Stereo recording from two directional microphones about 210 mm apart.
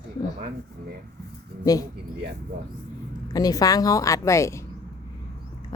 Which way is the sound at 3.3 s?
15° left (ahead or behind).